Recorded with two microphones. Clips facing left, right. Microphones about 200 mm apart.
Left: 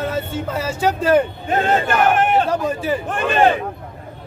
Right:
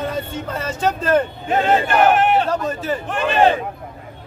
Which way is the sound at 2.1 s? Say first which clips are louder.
Even; 50° left (ahead or behind).